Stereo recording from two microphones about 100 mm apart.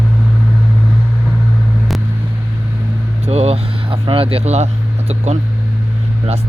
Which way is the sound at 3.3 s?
90° right.